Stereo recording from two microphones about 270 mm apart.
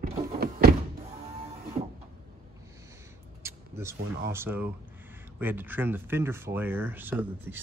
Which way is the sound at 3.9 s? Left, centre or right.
Right.